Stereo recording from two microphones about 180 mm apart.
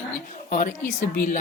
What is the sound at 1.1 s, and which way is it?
Speech, 50° left (ahead or behind).